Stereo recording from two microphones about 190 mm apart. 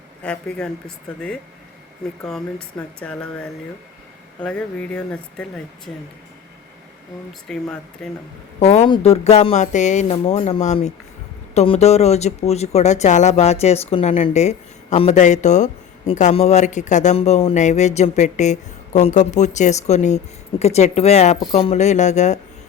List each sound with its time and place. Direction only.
0.2 s speech: 5° left (ahead or behind)
7.4 s speech: 5° left (ahead or behind)
8.5 s speech: 35° left (ahead or behind)